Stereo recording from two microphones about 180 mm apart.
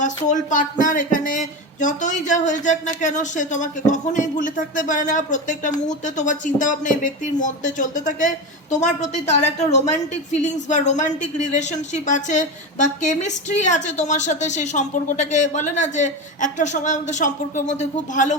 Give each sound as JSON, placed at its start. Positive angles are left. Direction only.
{"t": 0.3, "sound": "a woman's voice", "side_deg": 45}